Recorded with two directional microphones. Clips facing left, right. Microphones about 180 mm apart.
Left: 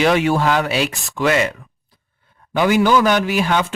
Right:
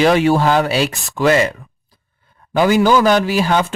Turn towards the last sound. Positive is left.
turn(degrees=-35)  # may be behind; listen again after turning